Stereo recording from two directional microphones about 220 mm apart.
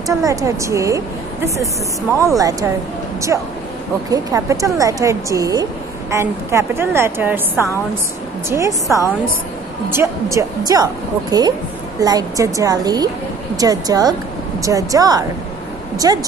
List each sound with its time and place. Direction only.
0.1 s a woman's voice: 15° right (ahead or behind)